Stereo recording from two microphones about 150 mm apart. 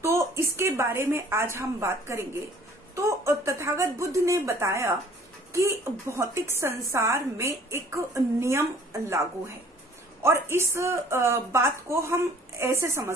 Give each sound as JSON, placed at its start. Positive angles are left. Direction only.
{"t": 0.0, "sound": "a sound", "side_deg": -20}
{"t": 0.6, "sound": "a woman's voice", "side_deg": -15}
{"t": 10.2, "sound": "a woman's voice", "side_deg": -15}